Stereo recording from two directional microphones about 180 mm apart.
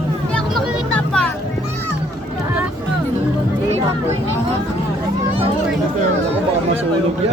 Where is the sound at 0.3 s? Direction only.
Centre (ahead or behind).